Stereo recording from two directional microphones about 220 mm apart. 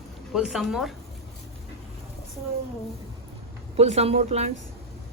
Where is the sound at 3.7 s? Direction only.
30° right (ahead or behind).